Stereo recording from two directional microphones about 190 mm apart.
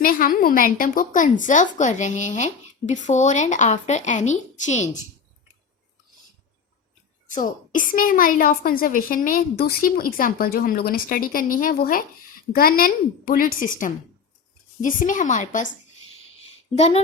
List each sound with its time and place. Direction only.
0.0 s a woman's voice: 50° left (ahead or behind)
7.3 s a woman's voice: 45° left (ahead or behind)
16.7 s a woman's voice: 30° left (ahead or behind)